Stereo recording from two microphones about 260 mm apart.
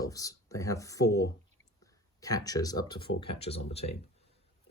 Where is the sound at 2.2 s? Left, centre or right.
Centre.